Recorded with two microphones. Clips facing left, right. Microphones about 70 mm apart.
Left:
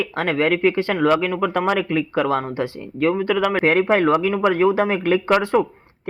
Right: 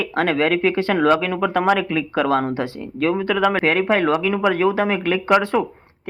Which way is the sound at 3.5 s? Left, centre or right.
Left.